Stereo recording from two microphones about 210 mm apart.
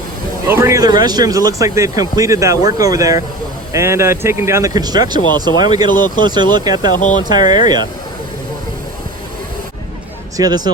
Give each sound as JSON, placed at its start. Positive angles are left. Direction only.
{"t": 0.4, "sound": "speech", "side_deg": -15}
{"t": 10.3, "sound": "speech", "side_deg": -20}